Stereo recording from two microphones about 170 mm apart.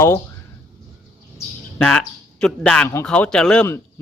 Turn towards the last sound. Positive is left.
turn(degrees=5)  # may be behind; listen again after turning